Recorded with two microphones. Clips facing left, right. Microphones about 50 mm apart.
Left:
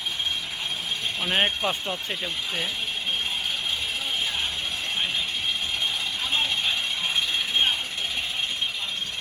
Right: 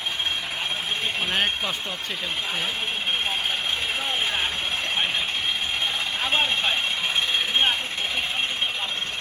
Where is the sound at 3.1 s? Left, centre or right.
Right.